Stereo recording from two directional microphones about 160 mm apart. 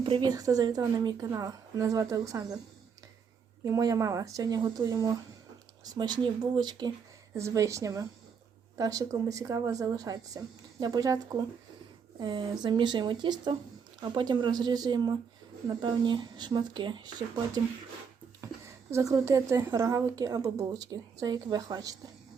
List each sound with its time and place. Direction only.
0.0 s speech: 30° right (ahead or behind)
3.6 s speech: 20° right (ahead or behind)